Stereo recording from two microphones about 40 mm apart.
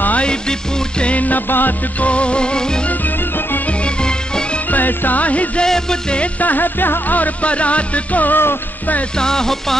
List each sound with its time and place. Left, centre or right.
0.2 s music: centre
1.0 s music: left
1.5 s music: left
2.0 s music: left
4.0 s music: left
4.6 s music: left
5.2 s music: left
5.7 s music: centre
6.4 s music: left
7.4 s music: left
9.2 s music: centre